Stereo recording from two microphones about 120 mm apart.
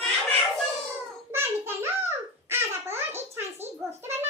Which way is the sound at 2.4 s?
20° right (ahead or behind).